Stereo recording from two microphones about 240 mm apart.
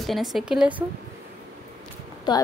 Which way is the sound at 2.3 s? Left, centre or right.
Centre.